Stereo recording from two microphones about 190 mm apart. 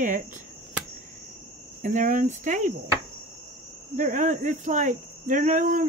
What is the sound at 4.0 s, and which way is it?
Speech, 40° right (ahead or behind).